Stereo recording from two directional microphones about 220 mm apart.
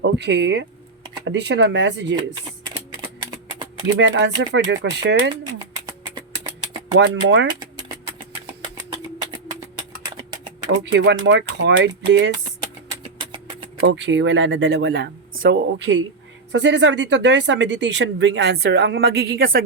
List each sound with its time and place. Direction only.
0.0 s speech: 50° right (ahead or behind)
3.9 s speech: 55° right (ahead or behind)
6.9 s speech: 50° right (ahead or behind)
10.9 s speech: 55° right (ahead or behind)
12.9 s a sound: 20° right (ahead or behind)
13.8 s speech: 55° right (ahead or behind)